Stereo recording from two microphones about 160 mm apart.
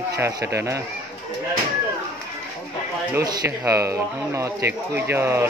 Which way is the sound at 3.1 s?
20° right (ahead or behind).